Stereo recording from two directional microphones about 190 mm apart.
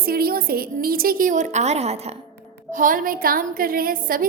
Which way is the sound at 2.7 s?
45° right (ahead or behind).